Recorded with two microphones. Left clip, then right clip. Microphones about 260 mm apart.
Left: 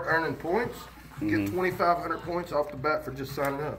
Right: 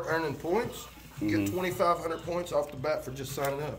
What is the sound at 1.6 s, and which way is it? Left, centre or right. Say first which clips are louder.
Speech: left 3 dB; right.